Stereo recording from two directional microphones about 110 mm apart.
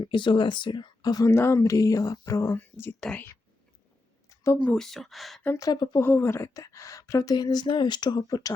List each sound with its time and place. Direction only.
0.0 s speech: 45° left (ahead or behind)
1.3 s a woman's voice: 25° left (ahead or behind)
2.6 s speech: 20° left (ahead or behind)
3.0 s speech: 10° left (ahead or behind)
4.5 s speech: 10° left (ahead or behind)
5.5 s a woman's voice: 35° left (ahead or behind)
6.0 s a woman's voice: 20° left (ahead or behind)